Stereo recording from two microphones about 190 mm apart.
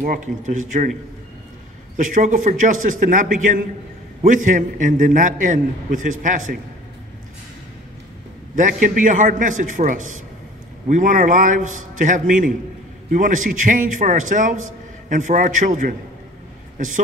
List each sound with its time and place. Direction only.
0.0 s a man's voice: 45° right (ahead or behind)
2.0 s a man's voice: 40° right (ahead or behind)
8.8 s a man's voice: 45° right (ahead or behind)